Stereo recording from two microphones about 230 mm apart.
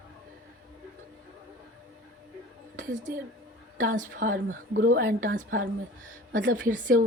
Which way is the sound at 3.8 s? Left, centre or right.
Right.